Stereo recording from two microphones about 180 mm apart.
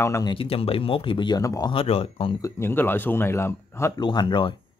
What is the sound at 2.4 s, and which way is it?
Speech, 15° left (ahead or behind).